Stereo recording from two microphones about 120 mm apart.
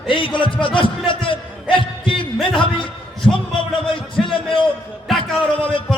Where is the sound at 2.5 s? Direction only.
45° left (ahead or behind).